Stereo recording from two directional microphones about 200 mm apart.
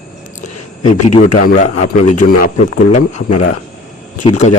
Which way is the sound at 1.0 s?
35° left (ahead or behind).